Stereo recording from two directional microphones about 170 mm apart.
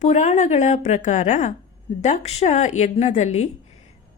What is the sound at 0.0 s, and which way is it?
A woman's voice, 45° left (ahead or behind).